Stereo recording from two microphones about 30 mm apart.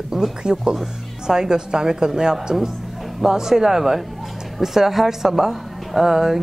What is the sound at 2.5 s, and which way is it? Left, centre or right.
A woman's voice, centre.